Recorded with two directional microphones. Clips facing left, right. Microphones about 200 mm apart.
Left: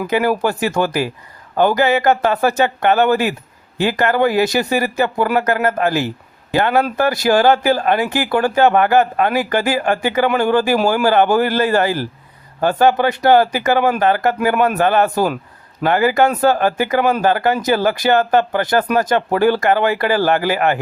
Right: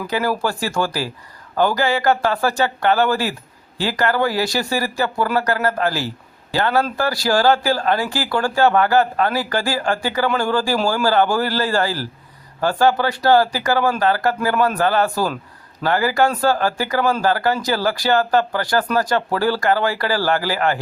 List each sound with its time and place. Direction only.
0.1 s speech: 20° left (ahead or behind)